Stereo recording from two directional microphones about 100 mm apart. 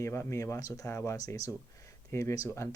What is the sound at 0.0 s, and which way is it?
Speech, 30° left (ahead or behind).